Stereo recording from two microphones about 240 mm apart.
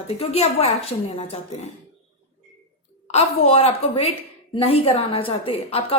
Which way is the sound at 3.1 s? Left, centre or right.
Left.